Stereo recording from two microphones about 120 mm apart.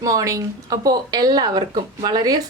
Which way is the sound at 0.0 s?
30° right (ahead or behind).